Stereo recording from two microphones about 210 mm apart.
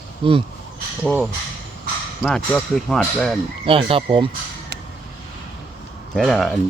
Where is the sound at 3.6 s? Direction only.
25° right (ahead or behind).